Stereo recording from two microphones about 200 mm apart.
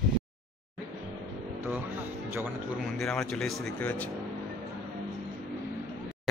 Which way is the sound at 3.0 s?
5° left (ahead or behind).